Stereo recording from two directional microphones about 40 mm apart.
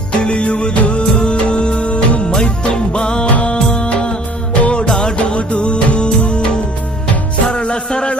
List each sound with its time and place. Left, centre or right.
0.2 s music: left
3.3 s music of bollywood: left
3.7 s music: left